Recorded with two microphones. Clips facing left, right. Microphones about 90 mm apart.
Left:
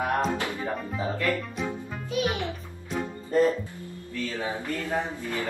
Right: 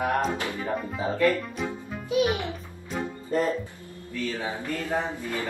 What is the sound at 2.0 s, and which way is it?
Music, 15° right (ahead or behind).